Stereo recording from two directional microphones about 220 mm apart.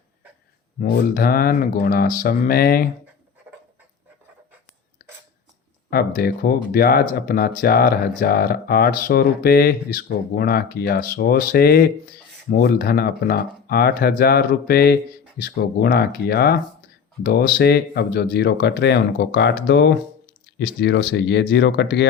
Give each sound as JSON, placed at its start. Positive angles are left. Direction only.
{"t": 0.8, "sound": "speech", "side_deg": 40}
{"t": 5.9, "sound": "speech", "side_deg": 45}